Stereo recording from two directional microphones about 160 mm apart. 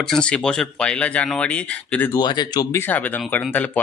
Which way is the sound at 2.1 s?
25° left (ahead or behind).